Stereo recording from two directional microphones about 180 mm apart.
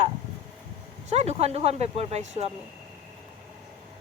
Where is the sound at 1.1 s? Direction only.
35° right (ahead or behind).